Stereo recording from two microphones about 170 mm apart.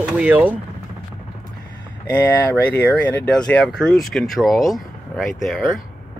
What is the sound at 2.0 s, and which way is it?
Speech, 10° left (ahead or behind).